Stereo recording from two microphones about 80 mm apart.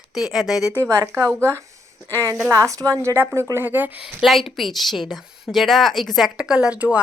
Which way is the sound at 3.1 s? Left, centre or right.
Right.